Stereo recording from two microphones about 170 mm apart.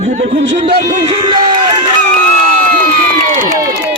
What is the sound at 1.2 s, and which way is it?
Speech, 30° right (ahead or behind).